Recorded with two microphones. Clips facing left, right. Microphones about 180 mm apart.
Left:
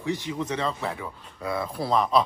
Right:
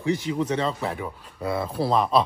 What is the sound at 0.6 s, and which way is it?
Speech, 25° right (ahead or behind).